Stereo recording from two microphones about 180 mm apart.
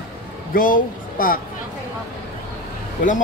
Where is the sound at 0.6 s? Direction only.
50° left (ahead or behind).